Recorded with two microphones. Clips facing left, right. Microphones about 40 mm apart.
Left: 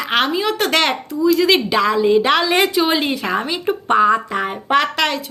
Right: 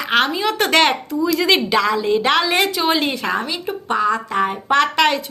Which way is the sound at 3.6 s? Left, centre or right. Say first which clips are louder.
Left 6 dB; left.